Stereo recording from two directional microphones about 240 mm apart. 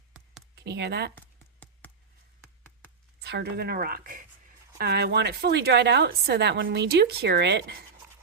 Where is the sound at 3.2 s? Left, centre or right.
Right.